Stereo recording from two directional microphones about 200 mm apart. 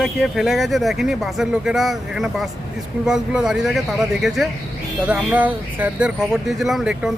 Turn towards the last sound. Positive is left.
turn(degrees=0)  # may be behind; listen again after turning